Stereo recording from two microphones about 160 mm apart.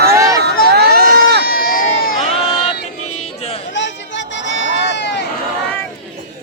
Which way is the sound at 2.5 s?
35° left (ahead or behind).